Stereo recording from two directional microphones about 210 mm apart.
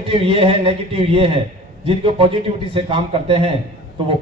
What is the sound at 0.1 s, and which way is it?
A man's voice, 25° right (ahead or behind).